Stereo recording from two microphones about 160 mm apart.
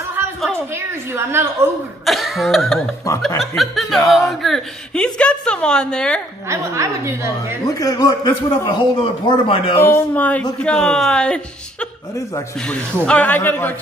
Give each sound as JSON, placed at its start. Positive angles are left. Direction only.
{"t": 0.7, "sound": "speech", "side_deg": -15}
{"t": 2.0, "sound": "cough", "side_deg": 0}
{"t": 3.3, "sound": "a woman's voice", "side_deg": 0}
{"t": 6.5, "sound": "speech", "side_deg": -15}
{"t": 7.6, "sound": "a man's voice", "side_deg": 25}
{"t": 9.8, "sound": "a man's voice", "side_deg": 10}